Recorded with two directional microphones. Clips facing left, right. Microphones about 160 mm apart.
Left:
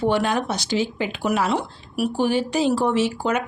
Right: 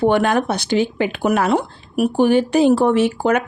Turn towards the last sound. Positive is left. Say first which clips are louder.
# right 5 dB
turn(degrees=-55)  # may be behind; listen again after turning